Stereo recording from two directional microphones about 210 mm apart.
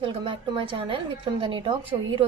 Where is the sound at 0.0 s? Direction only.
25° right (ahead or behind).